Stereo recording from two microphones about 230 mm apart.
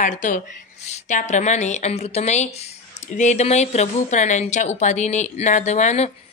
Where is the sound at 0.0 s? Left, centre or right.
Left.